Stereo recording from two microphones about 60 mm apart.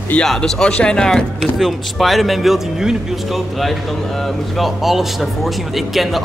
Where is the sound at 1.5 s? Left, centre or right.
Centre.